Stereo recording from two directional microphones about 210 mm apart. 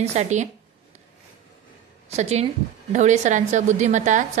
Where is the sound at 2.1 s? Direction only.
30° right (ahead or behind).